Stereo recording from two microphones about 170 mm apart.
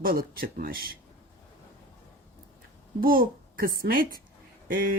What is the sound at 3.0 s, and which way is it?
A woman's voice, 60° right (ahead or behind).